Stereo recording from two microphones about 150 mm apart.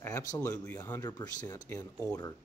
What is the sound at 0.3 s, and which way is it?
Speech, 20° left (ahead or behind).